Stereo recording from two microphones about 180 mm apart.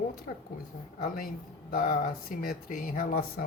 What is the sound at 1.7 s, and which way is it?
Speech, 55° left (ahead or behind).